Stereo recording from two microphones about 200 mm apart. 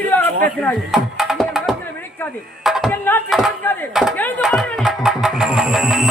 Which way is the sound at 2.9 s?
10° left (ahead or behind).